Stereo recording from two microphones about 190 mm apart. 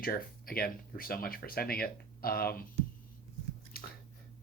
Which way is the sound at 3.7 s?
50° left (ahead or behind).